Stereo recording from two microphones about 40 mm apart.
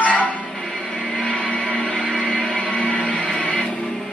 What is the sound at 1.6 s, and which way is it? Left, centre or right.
Music, left.